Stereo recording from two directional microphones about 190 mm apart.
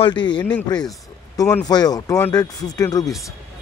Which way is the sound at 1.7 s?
20° left (ahead or behind).